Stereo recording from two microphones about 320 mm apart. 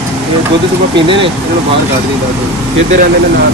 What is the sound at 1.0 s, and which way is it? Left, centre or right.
Speech, centre.